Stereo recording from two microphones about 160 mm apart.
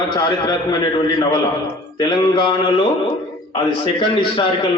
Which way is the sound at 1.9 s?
30° left (ahead or behind).